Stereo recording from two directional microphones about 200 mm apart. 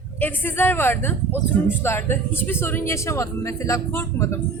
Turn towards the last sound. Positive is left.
turn(degrees=15)  # may be behind; listen again after turning